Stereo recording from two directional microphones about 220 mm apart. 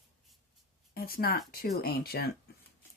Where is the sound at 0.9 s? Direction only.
45° left (ahead or behind).